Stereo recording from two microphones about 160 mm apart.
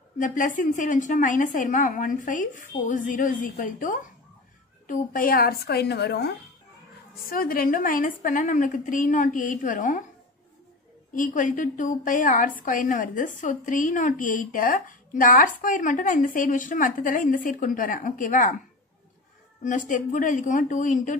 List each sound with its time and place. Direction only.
0.2 s a woman's voice: 55° left (ahead or behind); by 6.3 s 85° left
7.2 s a woman's voice: 65° left (ahead or behind)
11.1 s a woman's voice: 55° left (ahead or behind)
19.6 s a woman's voice: 55° left (ahead or behind)